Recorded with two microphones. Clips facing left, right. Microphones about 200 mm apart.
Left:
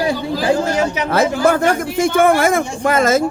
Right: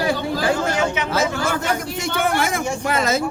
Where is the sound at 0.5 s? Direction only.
35° left (ahead or behind).